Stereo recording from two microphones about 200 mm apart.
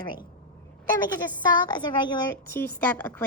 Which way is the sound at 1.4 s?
20° left (ahead or behind).